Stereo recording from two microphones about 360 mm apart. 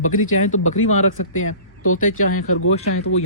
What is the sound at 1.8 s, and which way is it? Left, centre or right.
Speech, left.